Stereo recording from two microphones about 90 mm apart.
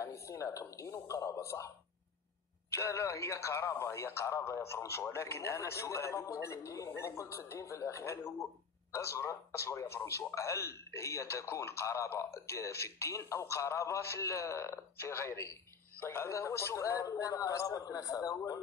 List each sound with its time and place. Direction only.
0.0 s speech: 35° left (ahead or behind)
2.7 s speech: 35° left (ahead or behind)
6.9 s speech: 25° left (ahead or behind); by 18.6 s 40° left (ahead or behind)